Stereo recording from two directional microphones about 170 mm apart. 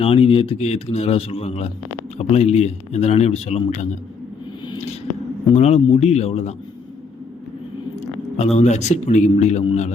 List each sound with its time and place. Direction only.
0.0 s speech: 35° left (ahead or behind)
5.5 s speech: 40° left (ahead or behind)
8.4 s speech: 40° left (ahead or behind)